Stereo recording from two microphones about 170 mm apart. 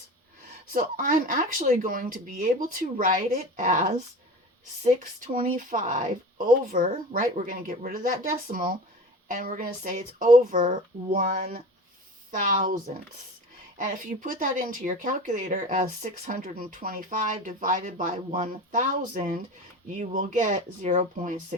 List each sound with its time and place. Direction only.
0.7 s speech: 55° right (ahead or behind)